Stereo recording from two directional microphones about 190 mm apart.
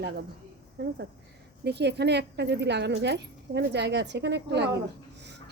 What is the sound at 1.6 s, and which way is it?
Speech, 65° right (ahead or behind).